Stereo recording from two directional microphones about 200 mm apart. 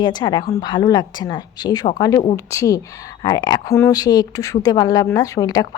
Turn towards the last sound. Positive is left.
turn(degrees=20)  # may be behind; listen again after turning